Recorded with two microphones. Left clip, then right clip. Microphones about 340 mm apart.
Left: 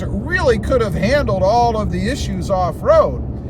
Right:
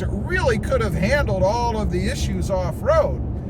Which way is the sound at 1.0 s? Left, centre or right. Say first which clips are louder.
Left 4 dB; centre.